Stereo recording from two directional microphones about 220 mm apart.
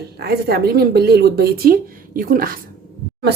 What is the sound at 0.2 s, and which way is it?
Speech, 45° right (ahead or behind).